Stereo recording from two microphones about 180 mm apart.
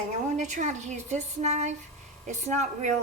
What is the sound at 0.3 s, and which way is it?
Speech, 40° right (ahead or behind).